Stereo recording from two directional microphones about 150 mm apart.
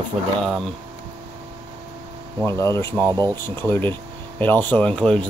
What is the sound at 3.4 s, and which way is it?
Speech, 15° left (ahead or behind).